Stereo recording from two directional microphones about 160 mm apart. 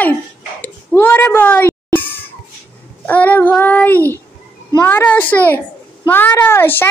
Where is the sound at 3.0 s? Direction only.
10° left (ahead or behind).